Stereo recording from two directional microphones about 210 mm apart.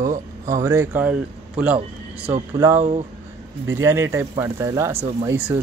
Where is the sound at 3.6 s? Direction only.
15° right (ahead or behind).